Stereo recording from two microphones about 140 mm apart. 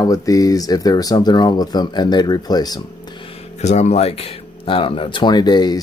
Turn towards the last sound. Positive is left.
turn(degrees=30)  # may be behind; listen again after turning